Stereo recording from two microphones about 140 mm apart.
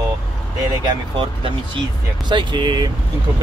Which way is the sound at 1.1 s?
35° right (ahead or behind).